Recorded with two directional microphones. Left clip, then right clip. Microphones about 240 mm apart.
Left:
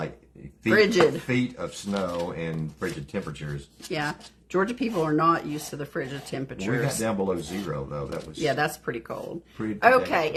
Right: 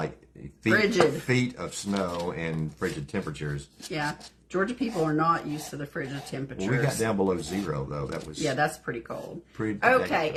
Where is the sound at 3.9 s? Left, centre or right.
Left.